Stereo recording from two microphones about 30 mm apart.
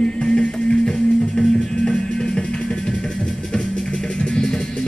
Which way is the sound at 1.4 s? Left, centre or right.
Centre.